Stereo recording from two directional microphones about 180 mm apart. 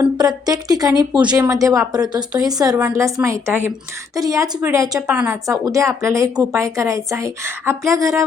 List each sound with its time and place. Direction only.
0.2 s a woman's voice: 20° right (ahead or behind)